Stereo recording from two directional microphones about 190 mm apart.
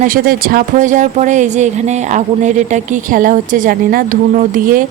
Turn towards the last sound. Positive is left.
turn(degrees=-45)  # may be behind; listen again after turning